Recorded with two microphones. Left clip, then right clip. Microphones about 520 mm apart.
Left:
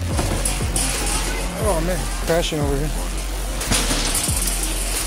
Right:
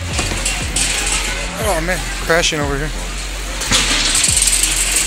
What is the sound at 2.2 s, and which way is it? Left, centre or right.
Speech, left.